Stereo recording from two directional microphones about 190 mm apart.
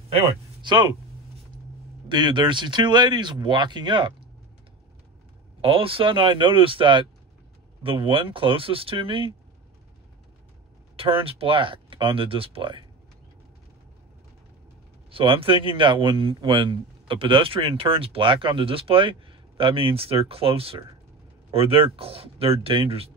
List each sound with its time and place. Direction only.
0.1 s speech: 30° right (ahead or behind)
2.0 s a man's voice: 25° right (ahead or behind)
5.6 s a man's voice: 30° right (ahead or behind)
11.0 s a man's voice: 30° right (ahead or behind)
15.0 s a man's voice: 30° right (ahead or behind)